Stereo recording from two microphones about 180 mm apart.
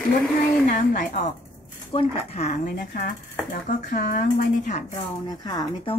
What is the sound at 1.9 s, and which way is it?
Speech, 35° left (ahead or behind).